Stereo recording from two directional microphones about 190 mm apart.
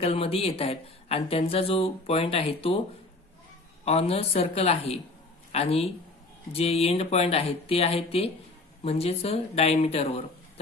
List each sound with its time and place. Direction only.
0.0 s speech: 30° left (ahead or behind)
3.8 s speech: 35° left (ahead or behind)